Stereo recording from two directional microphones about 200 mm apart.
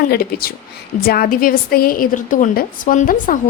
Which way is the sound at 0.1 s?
50° left (ahead or behind).